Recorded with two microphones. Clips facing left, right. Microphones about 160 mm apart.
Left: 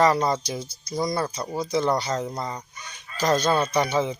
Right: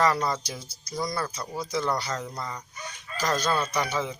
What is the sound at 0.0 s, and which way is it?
Speech, 25° left (ahead or behind).